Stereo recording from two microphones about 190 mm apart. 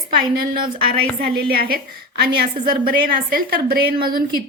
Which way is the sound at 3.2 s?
50° right (ahead or behind).